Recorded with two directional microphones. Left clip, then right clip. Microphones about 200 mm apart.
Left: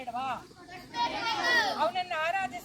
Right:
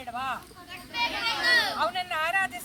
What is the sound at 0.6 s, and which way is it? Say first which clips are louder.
Speech: right 2 dB; 10° right (ahead or behind).